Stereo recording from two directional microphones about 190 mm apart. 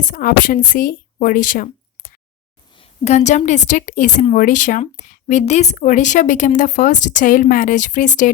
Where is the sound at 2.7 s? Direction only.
30° left (ahead or behind).